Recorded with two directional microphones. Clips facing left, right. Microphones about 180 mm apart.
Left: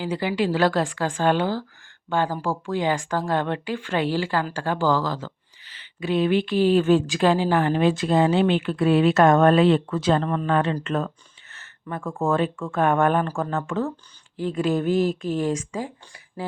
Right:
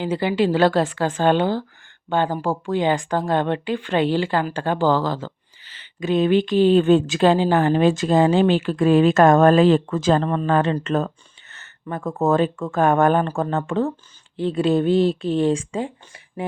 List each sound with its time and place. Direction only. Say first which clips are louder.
0.0 s speech: right 4 dB; 25° right (ahead or behind)